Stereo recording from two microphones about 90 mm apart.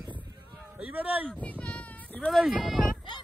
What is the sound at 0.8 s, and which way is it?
Speech, 15° right (ahead or behind).